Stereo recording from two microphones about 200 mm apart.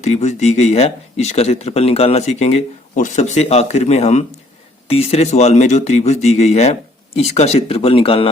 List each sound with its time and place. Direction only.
0.0 s speech: 35° left (ahead or behind)